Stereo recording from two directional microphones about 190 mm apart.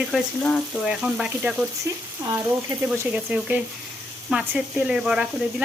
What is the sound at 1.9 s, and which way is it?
Speech, 15° right (ahead or behind).